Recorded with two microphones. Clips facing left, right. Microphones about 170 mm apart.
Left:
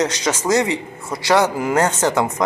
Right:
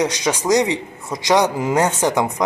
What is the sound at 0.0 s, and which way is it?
A man's voice, 10° right (ahead or behind).